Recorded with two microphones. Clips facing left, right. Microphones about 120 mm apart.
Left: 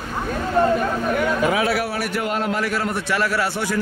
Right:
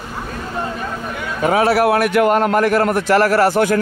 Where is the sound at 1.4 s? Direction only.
40° right (ahead or behind).